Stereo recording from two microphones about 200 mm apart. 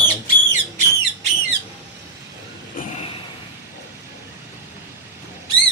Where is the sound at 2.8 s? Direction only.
35° left (ahead or behind).